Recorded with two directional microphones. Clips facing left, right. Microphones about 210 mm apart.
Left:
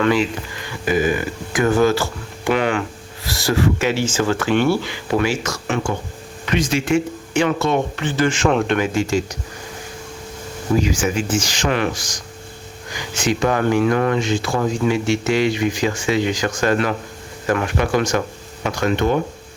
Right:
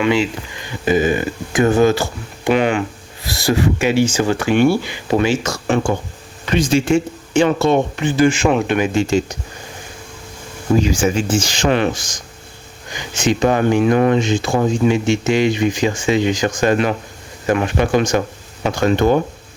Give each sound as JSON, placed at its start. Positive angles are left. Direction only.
{"t": 0.7, "sound": "speech", "side_deg": -25}
{"t": 5.1, "sound": "speech", "side_deg": -25}
{"t": 7.9, "sound": "speech", "side_deg": -15}
{"t": 8.8, "sound": "speech", "side_deg": -25}
{"t": 10.8, "sound": "speech", "side_deg": -30}